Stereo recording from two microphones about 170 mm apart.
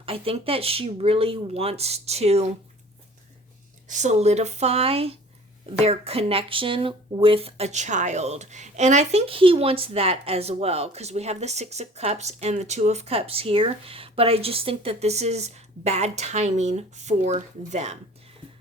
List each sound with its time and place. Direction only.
0.0 s speech: 35° right (ahead or behind)
3.8 s speech: 45° right (ahead or behind)